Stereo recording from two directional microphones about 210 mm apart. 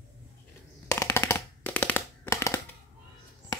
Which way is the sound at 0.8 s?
15° left (ahead or behind).